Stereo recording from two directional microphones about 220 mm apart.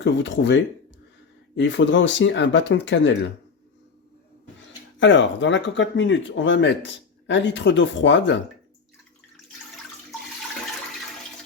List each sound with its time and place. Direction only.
0.0 s speech: 55° left (ahead or behind)
4.9 s speech: 55° left (ahead or behind)